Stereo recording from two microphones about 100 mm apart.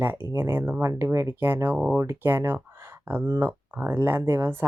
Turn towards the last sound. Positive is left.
turn(degrees=-25)  # may be behind; listen again after turning